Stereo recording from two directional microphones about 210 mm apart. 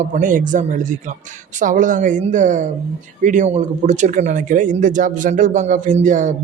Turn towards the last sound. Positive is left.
turn(degrees=-35)  # may be behind; listen again after turning